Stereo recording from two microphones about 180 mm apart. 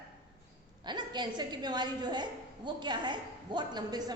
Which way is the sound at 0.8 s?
25° right (ahead or behind).